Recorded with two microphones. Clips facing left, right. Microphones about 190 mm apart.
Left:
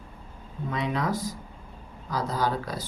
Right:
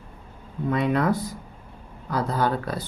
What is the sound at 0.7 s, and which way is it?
Speech, 55° right (ahead or behind).